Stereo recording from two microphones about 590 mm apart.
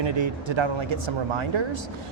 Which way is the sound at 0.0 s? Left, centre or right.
Right.